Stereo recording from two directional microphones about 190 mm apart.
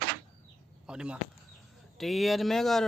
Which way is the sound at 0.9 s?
5° right (ahead or behind).